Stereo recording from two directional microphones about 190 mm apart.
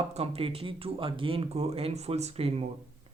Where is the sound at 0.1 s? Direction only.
30° right (ahead or behind).